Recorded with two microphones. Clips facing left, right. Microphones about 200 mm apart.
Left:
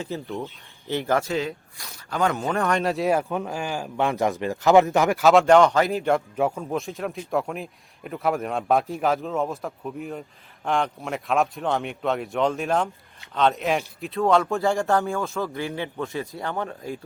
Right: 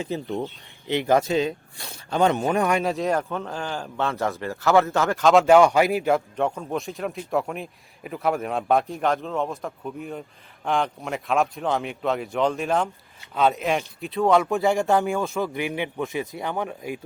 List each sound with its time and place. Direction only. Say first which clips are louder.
0.0 s speech: right 3 dB; 15° right (ahead or behind)
2.8 s speech: left 1 dB; centre (ahead or behind)
5.3 s a man's voice: right 1 dB; 5° right (ahead or behind)
14.5 s speech: right 1 dB; 20° right (ahead or behind)